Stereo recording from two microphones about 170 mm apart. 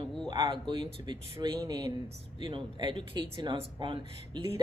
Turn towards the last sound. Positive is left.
turn(degrees=-30)  # may be behind; listen again after turning